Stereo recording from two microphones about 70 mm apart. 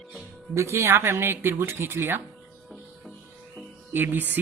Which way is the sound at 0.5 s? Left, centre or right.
Right.